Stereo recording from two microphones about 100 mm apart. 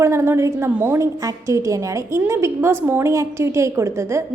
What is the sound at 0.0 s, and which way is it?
A woman's voice, 30° right (ahead or behind).